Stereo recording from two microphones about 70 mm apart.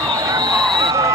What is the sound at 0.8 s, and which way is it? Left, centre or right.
Basketball bounce, right.